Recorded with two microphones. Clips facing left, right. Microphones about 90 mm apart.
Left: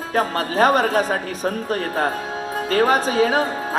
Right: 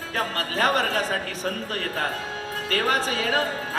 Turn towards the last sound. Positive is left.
turn(degrees=20)  # may be behind; listen again after turning